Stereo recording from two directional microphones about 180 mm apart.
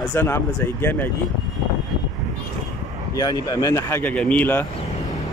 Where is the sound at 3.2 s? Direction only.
20° left (ahead or behind).